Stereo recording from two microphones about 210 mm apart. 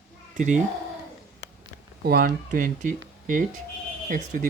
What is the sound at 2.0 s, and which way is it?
Speech, 45° right (ahead or behind).